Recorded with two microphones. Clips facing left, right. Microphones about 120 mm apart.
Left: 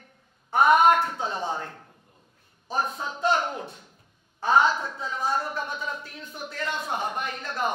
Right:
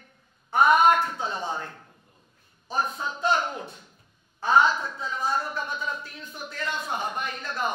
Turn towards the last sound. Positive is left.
turn(degrees=55)  # may be behind; listen again after turning